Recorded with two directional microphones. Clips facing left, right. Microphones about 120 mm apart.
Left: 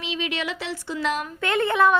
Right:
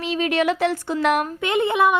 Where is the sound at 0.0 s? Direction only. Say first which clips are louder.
Right 8 dB; 45° right (ahead or behind).